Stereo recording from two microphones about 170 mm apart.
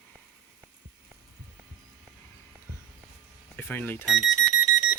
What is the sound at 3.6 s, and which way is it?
Speech, 10° left (ahead or behind).